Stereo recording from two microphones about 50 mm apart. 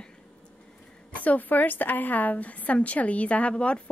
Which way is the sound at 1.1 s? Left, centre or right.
Left.